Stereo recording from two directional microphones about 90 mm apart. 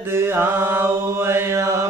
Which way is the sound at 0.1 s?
25° right (ahead or behind).